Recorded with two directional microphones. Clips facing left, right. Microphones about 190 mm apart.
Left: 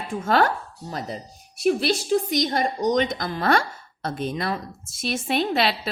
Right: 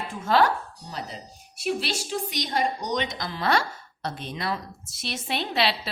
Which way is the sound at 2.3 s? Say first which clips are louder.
Left 4 dB; 50° left (ahead or behind).